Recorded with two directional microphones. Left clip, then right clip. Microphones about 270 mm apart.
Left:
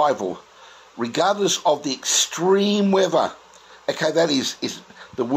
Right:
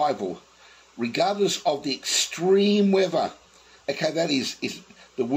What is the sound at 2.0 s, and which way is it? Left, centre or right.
Speech, left.